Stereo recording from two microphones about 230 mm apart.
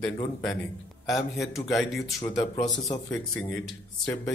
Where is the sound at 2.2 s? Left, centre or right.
Centre.